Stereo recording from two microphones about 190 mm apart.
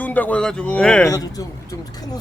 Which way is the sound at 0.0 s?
10° left (ahead or behind).